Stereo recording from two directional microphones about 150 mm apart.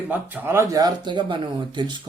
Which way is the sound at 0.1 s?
10° right (ahead or behind).